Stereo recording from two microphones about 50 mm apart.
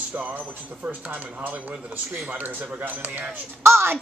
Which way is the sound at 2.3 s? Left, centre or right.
Right.